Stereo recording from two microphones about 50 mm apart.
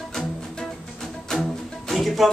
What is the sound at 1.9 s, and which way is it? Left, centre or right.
Music, centre.